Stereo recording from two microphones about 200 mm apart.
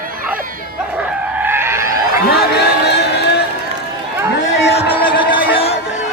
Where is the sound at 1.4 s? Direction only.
10° right (ahead or behind).